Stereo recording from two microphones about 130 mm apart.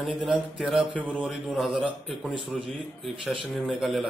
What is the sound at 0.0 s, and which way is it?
Speech, centre (ahead or behind).